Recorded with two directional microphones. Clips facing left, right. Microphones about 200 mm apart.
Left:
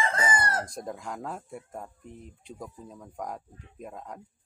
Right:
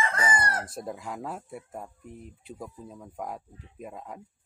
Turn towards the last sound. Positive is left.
turn(degrees=-5)  # may be behind; listen again after turning